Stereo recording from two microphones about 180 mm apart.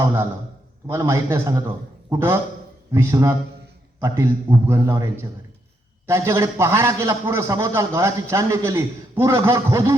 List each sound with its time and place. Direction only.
0.0 s a man's voice: 15° right (ahead or behind)